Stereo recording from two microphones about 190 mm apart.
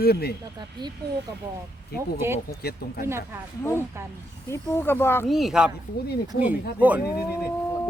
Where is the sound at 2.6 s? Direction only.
55° left (ahead or behind).